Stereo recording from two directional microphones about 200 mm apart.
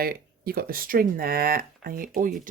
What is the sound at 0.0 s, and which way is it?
Speech, 50° right (ahead or behind).